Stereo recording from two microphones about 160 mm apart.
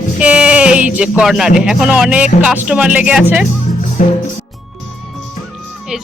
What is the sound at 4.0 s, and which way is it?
Music, 50° left (ahead or behind).